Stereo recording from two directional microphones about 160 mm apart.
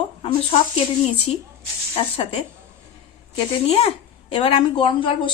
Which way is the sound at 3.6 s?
35° left (ahead or behind).